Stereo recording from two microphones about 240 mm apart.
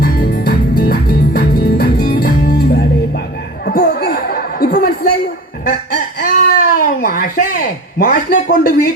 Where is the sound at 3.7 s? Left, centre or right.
Left.